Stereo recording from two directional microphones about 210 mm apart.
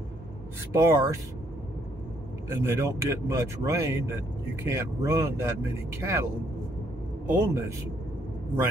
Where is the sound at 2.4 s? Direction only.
10° right (ahead or behind).